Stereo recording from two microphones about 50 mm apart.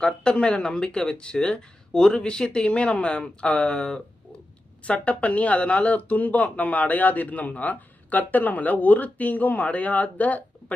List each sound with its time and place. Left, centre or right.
0.0 s speech: centre